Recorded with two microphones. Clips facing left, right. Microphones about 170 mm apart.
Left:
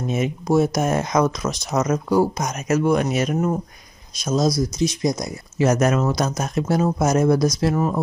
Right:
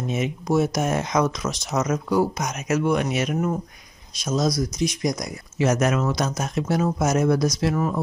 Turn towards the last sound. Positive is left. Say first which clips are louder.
# left 2 dB
turn(degrees=35)  # may be behind; listen again after turning